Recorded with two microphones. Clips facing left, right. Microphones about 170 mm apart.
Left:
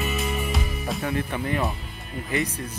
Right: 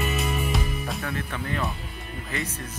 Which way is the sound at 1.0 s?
20° left (ahead or behind).